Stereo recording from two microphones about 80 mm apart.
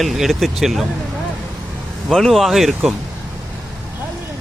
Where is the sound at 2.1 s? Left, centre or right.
Centre.